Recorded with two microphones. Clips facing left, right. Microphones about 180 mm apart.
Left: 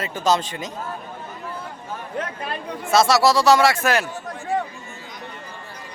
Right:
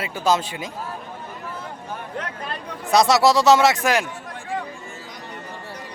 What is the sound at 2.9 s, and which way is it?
Speech, 20° right (ahead or behind).